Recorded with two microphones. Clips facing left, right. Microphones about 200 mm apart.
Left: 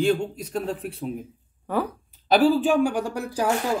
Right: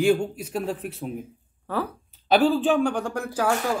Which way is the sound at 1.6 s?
15° left (ahead or behind).